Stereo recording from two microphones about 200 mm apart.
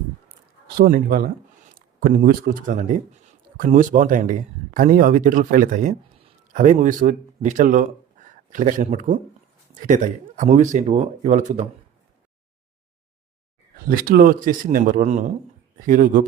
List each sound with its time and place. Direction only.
0.8 s speech: 45° right (ahead or behind)
13.8 s speech: 45° right (ahead or behind)